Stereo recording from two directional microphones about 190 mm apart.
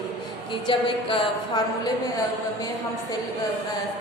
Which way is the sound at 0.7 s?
25° left (ahead or behind).